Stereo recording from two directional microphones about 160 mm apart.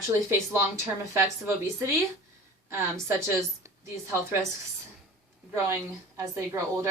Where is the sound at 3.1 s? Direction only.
15° right (ahead or behind).